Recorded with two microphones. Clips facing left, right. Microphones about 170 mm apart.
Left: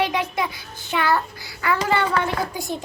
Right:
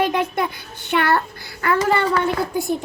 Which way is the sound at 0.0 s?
55° right (ahead or behind).